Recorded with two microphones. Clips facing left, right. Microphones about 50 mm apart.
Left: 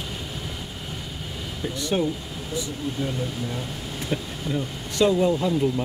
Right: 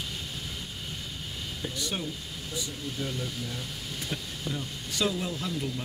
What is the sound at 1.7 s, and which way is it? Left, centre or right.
Speech, centre.